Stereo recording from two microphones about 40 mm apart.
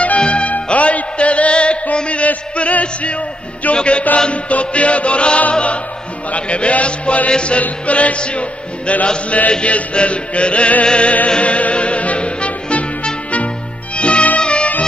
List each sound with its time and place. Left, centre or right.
0.2 s music: left
3.7 s chant: left
4.3 s music: left
9.5 s chant: left
11.2 s music: left